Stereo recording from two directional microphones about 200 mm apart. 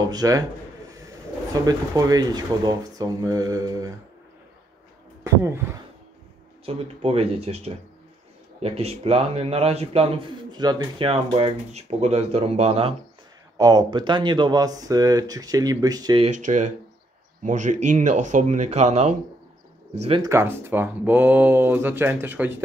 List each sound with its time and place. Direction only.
0.0 s speech: 20° right (ahead or behind)
1.5 s speech: 20° right (ahead or behind)
6.6 s a man's voice: 30° right (ahead or behind)
13.6 s speech: 20° right (ahead or behind)
16.2 s a man's voice: 40° right (ahead or behind)
20.2 s speech: 10° right (ahead or behind)